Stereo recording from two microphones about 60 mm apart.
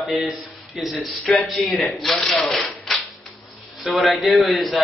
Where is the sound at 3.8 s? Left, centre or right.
Centre.